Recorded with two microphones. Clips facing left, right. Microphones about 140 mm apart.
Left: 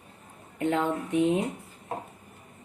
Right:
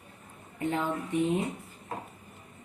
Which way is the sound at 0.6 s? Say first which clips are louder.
Left 4 dB; 85° left.